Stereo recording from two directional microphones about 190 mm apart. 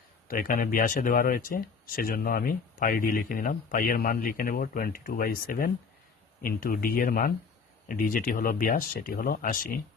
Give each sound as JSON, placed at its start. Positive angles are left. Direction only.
{"t": 0.3, "sound": "speech", "side_deg": 45}